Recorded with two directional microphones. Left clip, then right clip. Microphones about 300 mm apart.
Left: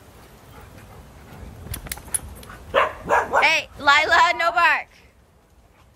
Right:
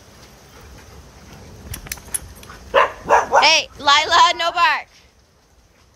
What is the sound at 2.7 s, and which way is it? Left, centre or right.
Dog, right.